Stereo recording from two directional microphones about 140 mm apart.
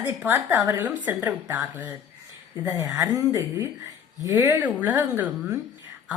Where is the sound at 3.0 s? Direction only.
25° right (ahead or behind).